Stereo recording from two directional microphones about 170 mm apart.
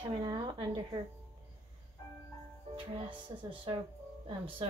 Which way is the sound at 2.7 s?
30° right (ahead or behind).